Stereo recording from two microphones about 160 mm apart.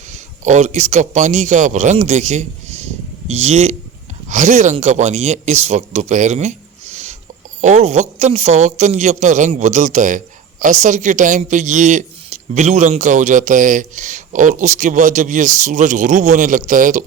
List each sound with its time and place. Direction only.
0.1 s a man's voice: 45° right (ahead or behind)